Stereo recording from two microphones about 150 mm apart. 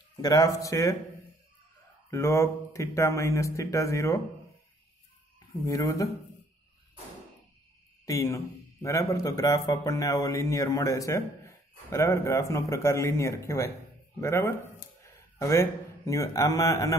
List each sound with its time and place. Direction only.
0.2 s a man's voice: 25° left (ahead or behind)
2.0 s a man's voice: 20° left (ahead or behind)
5.7 s a man's voice: 20° left (ahead or behind)
8.0 s a man's voice: 20° left (ahead or behind)